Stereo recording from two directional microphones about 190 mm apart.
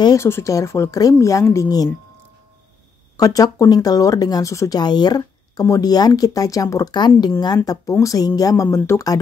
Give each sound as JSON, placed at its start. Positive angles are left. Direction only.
{"t": 0.0, "sound": "speech", "side_deg": 15}
{"t": 3.2, "sound": "speech", "side_deg": 20}